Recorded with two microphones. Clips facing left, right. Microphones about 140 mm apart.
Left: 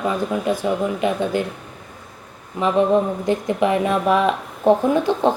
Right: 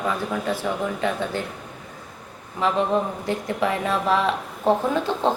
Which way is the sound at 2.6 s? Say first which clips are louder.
Left 5 dB; 15° left (ahead or behind).